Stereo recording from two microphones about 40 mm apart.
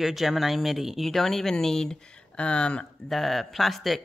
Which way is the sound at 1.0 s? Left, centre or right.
Centre.